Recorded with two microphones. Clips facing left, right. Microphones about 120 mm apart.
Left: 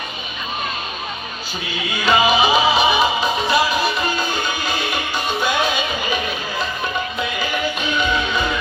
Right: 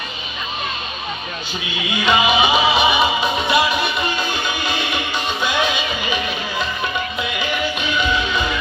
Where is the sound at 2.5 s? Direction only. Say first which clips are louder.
Even; centre (ahead or behind).